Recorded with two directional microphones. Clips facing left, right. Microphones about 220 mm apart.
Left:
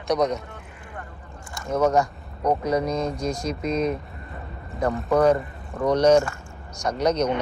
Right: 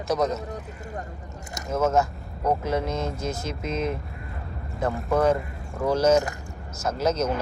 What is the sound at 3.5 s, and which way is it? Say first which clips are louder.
Speech: left 5 dB; 25° right (ahead or behind).